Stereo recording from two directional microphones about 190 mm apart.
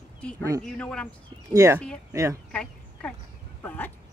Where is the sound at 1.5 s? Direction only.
15° right (ahead or behind).